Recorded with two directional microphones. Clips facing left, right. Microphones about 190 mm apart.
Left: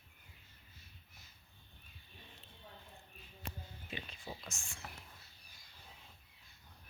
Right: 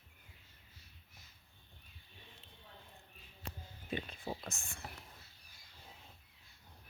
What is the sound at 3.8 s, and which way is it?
Whispering, 50° right (ahead or behind).